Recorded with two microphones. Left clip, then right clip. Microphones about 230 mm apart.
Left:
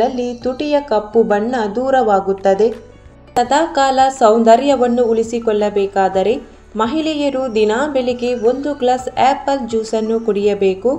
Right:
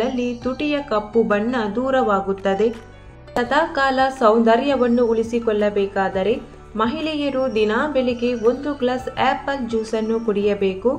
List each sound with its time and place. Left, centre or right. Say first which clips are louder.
0.0 s a woman's voice: left 6 dB; centre
3.3 s a woman's voice: left 5 dB; centre